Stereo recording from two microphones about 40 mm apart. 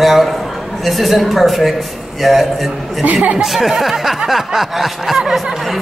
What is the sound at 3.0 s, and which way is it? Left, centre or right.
Speech, right.